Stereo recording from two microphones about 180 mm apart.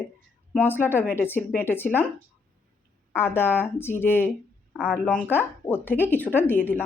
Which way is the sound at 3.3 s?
10° left (ahead or behind).